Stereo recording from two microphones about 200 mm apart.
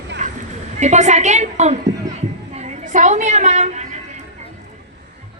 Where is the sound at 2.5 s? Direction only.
35° right (ahead or behind).